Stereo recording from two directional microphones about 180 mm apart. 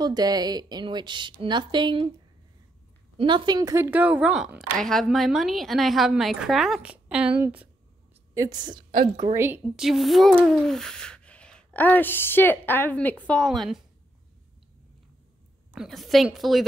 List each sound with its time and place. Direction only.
0.0 s a woman's voice: 20° right (ahead or behind)
3.2 s a woman's voice: 25° right (ahead or behind); by 7.6 s 10° right (ahead or behind)
8.4 s a woman's voice: 20° right (ahead or behind)
9.2 s a woman's voice: 15° right (ahead or behind)
9.8 s a woman's voice: centre (ahead or behind)
15.7 s a woman's voice: centre (ahead or behind)